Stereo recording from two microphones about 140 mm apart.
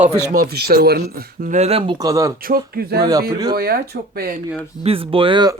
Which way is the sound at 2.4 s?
90° right.